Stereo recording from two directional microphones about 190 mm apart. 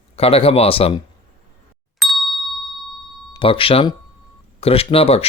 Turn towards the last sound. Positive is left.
turn(degrees=30)  # may be behind; listen again after turning